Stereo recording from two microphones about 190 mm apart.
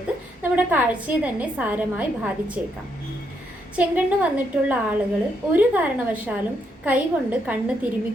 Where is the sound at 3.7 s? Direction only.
10° right (ahead or behind).